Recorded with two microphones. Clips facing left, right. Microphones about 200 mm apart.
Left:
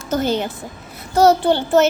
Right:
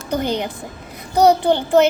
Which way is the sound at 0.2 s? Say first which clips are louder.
Left 2 dB; 15° right (ahead or behind).